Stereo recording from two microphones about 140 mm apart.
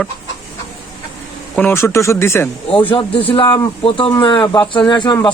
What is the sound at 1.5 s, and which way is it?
Speech, 15° left (ahead or behind).